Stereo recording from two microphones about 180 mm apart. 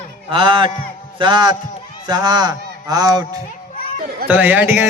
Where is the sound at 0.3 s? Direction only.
25° right (ahead or behind).